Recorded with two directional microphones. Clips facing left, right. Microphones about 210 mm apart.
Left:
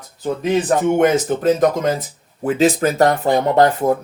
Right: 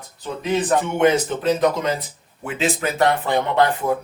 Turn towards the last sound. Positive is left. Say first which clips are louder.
# left 5 dB
turn(degrees=40)  # may be behind; listen again after turning